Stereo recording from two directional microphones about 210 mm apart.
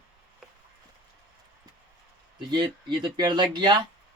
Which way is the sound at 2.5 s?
20° right (ahead or behind).